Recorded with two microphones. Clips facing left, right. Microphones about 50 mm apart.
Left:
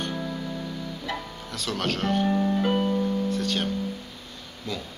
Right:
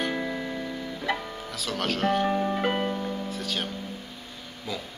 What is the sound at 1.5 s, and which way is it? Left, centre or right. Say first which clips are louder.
Speech: left 1 dB; centre.